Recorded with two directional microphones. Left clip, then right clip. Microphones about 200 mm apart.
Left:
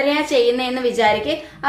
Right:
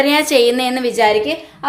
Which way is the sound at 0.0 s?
50° right (ahead or behind).